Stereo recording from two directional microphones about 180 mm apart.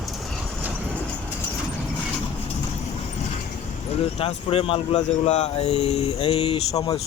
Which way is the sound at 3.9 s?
35° left (ahead or behind).